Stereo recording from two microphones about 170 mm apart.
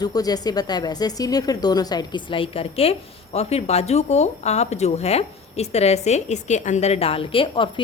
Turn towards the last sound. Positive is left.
turn(degrees=30)  # may be behind; listen again after turning